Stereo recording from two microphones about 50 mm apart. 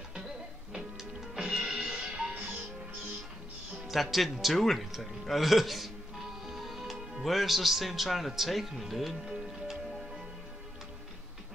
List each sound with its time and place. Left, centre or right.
0.7 s music: centre; by 2.6 s right
3.7 s speech: centre